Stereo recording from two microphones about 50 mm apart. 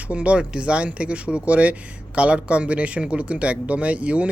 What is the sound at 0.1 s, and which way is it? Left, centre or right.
Speech, right.